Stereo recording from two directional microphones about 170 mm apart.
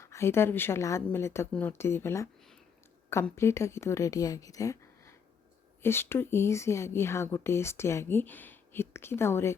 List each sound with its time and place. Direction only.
0.0 s speech: 15° left (ahead or behind)